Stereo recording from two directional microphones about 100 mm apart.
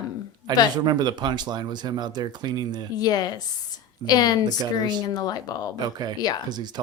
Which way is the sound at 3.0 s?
40° left (ahead or behind).